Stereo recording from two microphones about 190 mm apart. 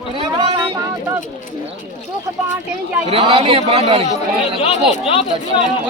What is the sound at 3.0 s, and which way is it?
A man's voice, 30° right (ahead or behind).